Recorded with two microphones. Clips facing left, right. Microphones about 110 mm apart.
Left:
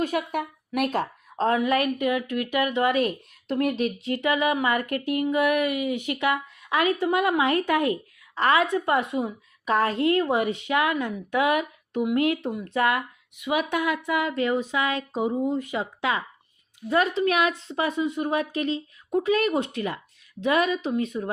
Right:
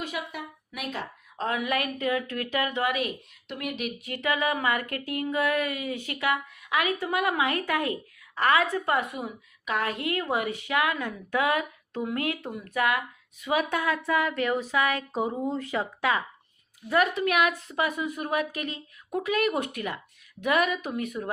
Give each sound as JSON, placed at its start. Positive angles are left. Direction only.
{"t": 0.0, "sound": "speech", "side_deg": 50}
{"t": 1.4, "sound": "a woman's voice", "side_deg": 30}
{"t": 3.5, "sound": "a woman's voice", "side_deg": 35}
{"t": 13.4, "sound": "a woman's voice", "side_deg": 15}